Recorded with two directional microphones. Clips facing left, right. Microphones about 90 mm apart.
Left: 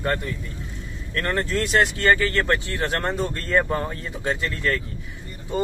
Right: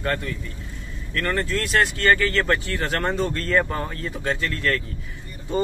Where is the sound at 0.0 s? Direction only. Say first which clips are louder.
Left 1 dB; 15° left (ahead or behind).